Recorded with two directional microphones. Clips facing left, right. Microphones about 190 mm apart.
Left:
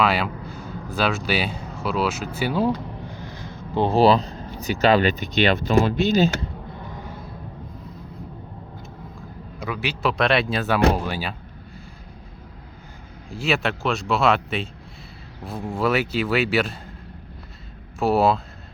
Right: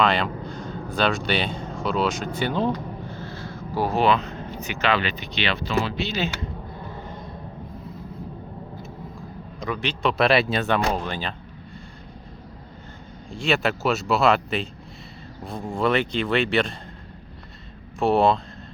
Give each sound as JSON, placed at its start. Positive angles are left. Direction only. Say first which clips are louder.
{"t": 0.0, "sound": "speech", "louder": "even", "side_deg": 5}
{"t": 6.9, "sound": "music", "louder": "even", "side_deg": 10}
{"t": 9.6, "sound": "speech", "louder": "even", "side_deg": 5}
{"t": 13.3, "sound": "speech", "louder": "even", "side_deg": 5}
{"t": 18.0, "sound": "speech", "louder": "even", "side_deg": 5}